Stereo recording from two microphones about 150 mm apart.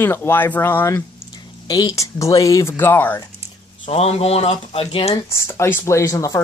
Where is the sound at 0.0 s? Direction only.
15° left (ahead or behind).